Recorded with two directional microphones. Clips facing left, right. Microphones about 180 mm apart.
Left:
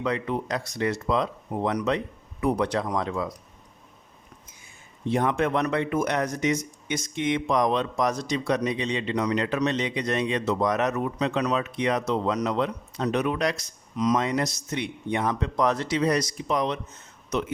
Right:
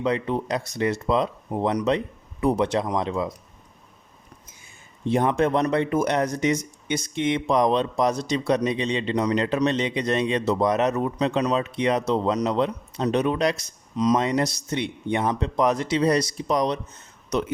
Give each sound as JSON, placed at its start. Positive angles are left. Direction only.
{"t": 0.0, "sound": "speech", "side_deg": -25}
{"t": 5.0, "sound": "speech", "side_deg": -25}
{"t": 16.0, "sound": "speech", "side_deg": -30}